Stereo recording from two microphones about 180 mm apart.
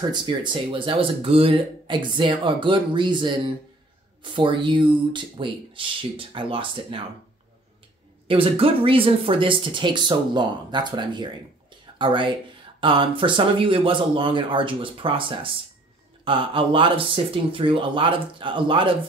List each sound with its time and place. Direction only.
0.1 s speech: 25° right (ahead or behind)
8.3 s speech: 30° right (ahead or behind)
11.8 s a sound: 25° right (ahead or behind)
12.8 s speech: 30° right (ahead or behind)